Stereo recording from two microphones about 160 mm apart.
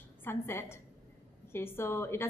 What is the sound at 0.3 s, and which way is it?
A woman's voice, 15° left (ahead or behind).